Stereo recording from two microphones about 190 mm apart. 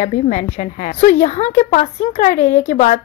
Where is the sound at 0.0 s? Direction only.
40° left (ahead or behind).